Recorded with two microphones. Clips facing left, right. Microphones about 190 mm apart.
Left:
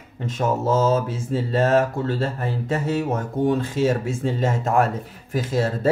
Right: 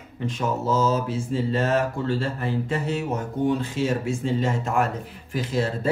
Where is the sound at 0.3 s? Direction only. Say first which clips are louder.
Left 4 dB; 50° left (ahead or behind).